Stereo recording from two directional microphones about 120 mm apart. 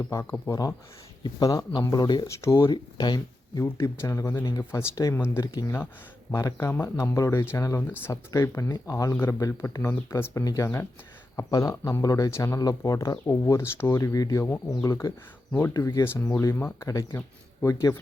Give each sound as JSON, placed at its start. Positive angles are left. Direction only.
{"t": 0.0, "sound": "speech", "side_deg": 25}
{"t": 2.2, "sound": "speech", "side_deg": 25}
{"t": 2.6, "sound": "speech", "side_deg": 35}
{"t": 3.6, "sound": "speech", "side_deg": 25}
{"t": 14.4, "sound": "speech", "side_deg": 20}